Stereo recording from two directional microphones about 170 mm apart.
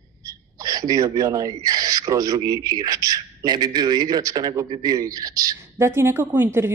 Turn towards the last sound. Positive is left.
turn(degrees=-15)  # may be behind; listen again after turning